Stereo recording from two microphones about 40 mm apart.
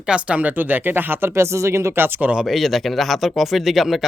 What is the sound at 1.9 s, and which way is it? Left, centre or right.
Speech, right.